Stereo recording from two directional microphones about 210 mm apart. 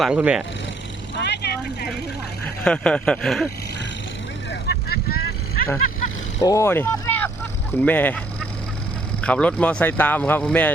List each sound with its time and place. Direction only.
0.0 s speech: 5° right (ahead or behind)
1.2 s vehicle: 50° left (ahead or behind)
2.6 s speech: 5° left (ahead or behind)
4.7 s vehicle: 50° left (ahead or behind)
6.4 s speech: 15° left (ahead or behind)
9.2 s speech: 5° left (ahead or behind)